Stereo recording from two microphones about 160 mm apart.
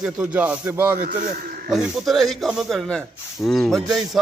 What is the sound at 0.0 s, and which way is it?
Speech, 10° right (ahead or behind).